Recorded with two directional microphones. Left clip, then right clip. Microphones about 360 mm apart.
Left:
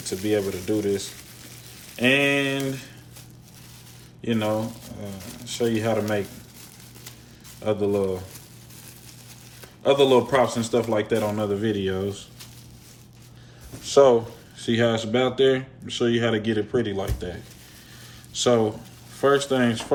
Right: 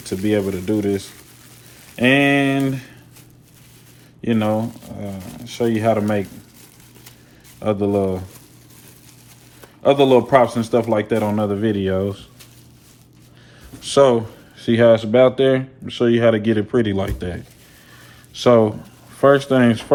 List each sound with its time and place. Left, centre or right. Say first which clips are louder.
0.0 s speech: right 4 dB; centre
4.2 s speech: right 5 dB; centre
4.8 s speech: right 6 dB; centre
5.5 s speech: right 6 dB; centre
7.6 s speech: right 4 dB; centre
9.8 s speech: right 4 dB; centre
13.8 s speech: right 2 dB; centre